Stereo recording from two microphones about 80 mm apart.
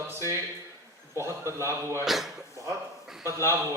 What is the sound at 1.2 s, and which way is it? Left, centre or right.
Speech, right.